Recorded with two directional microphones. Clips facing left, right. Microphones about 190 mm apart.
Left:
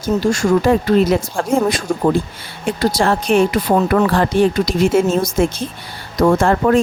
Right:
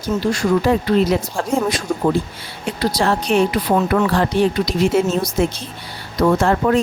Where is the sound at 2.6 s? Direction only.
50° left (ahead or behind).